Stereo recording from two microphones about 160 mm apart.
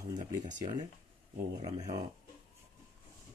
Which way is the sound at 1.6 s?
25° right (ahead or behind).